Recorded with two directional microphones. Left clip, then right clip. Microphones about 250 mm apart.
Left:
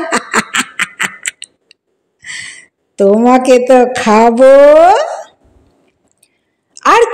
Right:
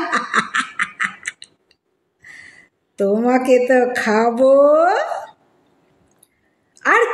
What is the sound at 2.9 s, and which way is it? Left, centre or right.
A woman's voice, left.